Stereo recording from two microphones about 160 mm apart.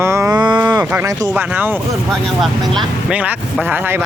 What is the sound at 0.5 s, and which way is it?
Speech, 15° right (ahead or behind).